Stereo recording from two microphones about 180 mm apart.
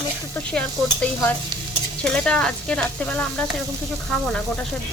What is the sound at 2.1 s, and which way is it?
Speech, 5° left (ahead or behind).